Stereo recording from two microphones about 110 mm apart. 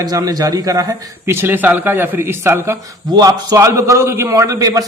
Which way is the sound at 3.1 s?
35° right (ahead or behind).